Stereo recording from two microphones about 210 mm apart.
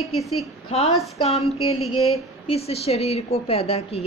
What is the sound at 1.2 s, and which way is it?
A woman's voice, 30° left (ahead or behind).